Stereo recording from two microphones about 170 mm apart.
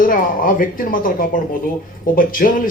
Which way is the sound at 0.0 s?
55° left (ahead or behind).